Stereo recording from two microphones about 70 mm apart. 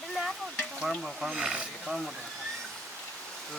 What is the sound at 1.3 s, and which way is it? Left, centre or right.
Speech, centre.